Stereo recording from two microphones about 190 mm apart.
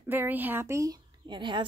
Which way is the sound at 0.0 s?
10° right (ahead or behind).